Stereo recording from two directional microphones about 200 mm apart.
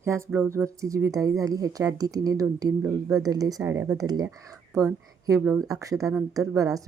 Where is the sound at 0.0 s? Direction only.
15° right (ahead or behind).